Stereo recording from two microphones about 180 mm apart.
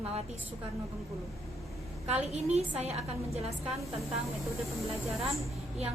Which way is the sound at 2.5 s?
35° right (ahead or behind).